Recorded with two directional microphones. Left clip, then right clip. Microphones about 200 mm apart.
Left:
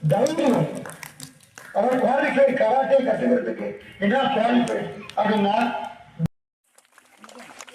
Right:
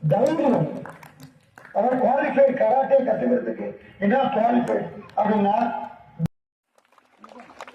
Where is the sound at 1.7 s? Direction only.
5° right (ahead or behind).